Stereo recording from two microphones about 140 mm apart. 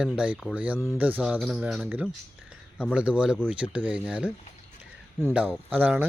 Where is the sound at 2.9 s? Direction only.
10° right (ahead or behind).